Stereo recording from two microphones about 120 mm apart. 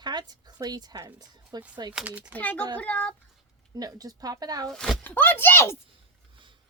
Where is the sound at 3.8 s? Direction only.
30° right (ahead or behind).